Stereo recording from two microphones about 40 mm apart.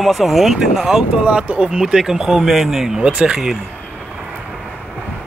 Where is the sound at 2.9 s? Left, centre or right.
Right.